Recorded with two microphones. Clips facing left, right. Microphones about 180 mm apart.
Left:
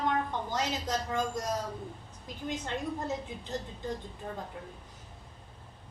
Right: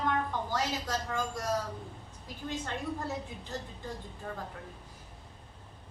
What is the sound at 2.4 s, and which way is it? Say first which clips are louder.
A woman's voice: left 1 dB; 20° left (ahead or behind).